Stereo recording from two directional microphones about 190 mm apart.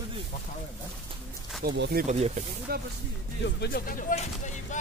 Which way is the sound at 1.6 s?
50° right (ahead or behind).